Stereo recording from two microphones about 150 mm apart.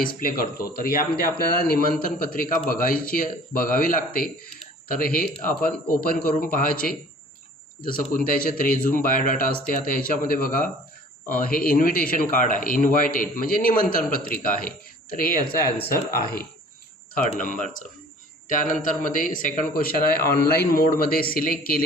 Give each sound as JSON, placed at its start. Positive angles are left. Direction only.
{"t": 0.0, "sound": "a man's voice", "side_deg": 70}
{"t": 17.3, "sound": "a man's voice", "side_deg": 60}